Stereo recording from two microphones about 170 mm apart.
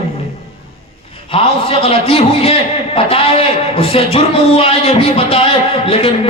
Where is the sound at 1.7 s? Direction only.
35° left (ahead or behind).